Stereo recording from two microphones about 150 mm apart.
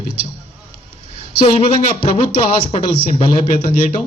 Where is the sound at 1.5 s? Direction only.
40° left (ahead or behind).